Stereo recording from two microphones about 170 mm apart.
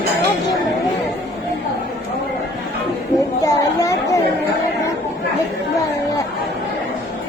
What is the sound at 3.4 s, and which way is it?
Chatter, 20° left (ahead or behind).